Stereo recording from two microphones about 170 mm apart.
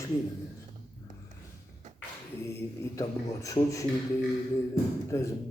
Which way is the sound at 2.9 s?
20° left (ahead or behind).